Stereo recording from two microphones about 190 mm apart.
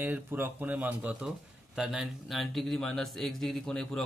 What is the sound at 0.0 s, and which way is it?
A man's voice, 10° right (ahead or behind).